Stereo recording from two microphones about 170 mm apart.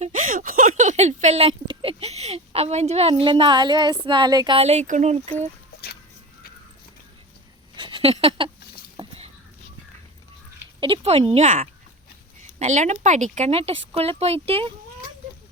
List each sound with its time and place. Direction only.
0.0 s speech: 50° right (ahead or behind); by 4.5 s 25° right (ahead or behind)
4.5 s speech: 40° right (ahead or behind)
7.8 s speech: 30° right (ahead or behind)
9.0 s a sound: 35° right (ahead or behind)
10.8 s speech: 30° right (ahead or behind)